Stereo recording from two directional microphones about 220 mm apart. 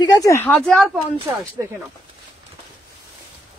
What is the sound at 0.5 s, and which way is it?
Speech, centre (ahead or behind).